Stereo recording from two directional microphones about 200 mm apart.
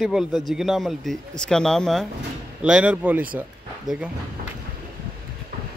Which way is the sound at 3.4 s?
5° right (ahead or behind).